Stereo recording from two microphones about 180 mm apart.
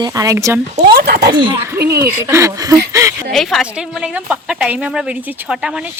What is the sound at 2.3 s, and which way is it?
Speech, 15° right (ahead or behind).